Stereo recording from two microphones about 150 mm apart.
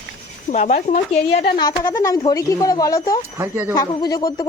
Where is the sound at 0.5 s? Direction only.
55° left (ahead or behind).